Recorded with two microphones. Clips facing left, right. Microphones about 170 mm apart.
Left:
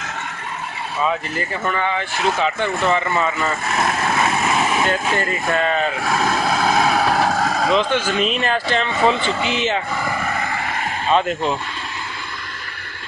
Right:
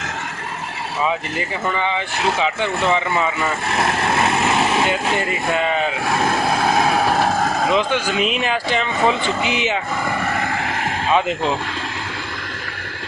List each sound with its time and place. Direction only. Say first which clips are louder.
1.7 s speech: even; 15° right (ahead or behind)
4.8 s speech: even; 10° right (ahead or behind)
7.6 s speech: left 2 dB; 15° right (ahead or behind)
10.4 s a sound: right 2 dB; 65° right (ahead or behind)
11.1 s speech: left 1 dB; 5° right (ahead or behind)